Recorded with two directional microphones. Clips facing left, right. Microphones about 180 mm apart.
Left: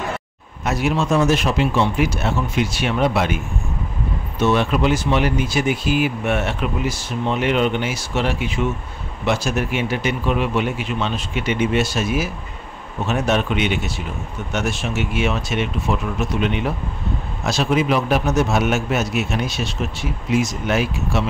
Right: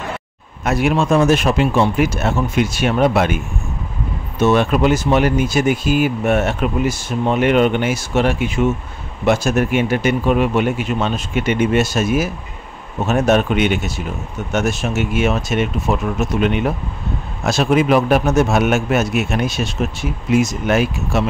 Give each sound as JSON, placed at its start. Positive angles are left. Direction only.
{"t": 0.7, "sound": "speech", "side_deg": -60}
{"t": 4.4, "sound": "speech", "side_deg": -45}